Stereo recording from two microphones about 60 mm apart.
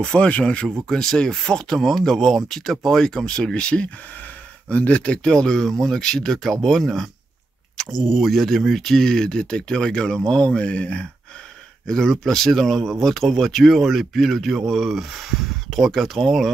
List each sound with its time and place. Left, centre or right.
0.0 s speech: centre
11.9 s a man's voice: centre